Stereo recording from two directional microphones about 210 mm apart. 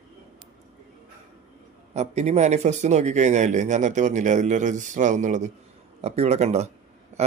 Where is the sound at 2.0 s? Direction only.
30° right (ahead or behind).